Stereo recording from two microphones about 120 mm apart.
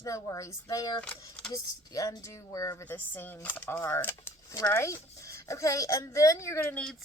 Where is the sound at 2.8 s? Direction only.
15° left (ahead or behind).